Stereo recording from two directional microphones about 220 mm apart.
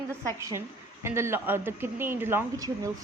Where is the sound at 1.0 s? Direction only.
10° right (ahead or behind).